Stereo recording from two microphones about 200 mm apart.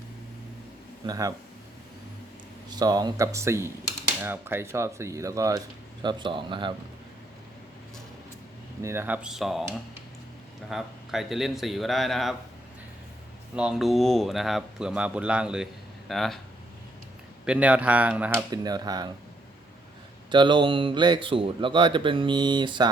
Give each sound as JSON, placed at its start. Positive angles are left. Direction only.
{"t": 1.0, "sound": "speech", "side_deg": -15}
{"t": 2.6, "sound": "speech", "side_deg": -20}
{"t": 8.8, "sound": "speech", "side_deg": -10}
{"t": 10.7, "sound": "speech", "side_deg": 0}
{"t": 13.6, "sound": "speech", "side_deg": -5}
{"t": 17.4, "sound": "speech", "side_deg": -5}
{"t": 18.5, "sound": "speech", "side_deg": -20}
{"t": 20.3, "sound": "speech", "side_deg": -25}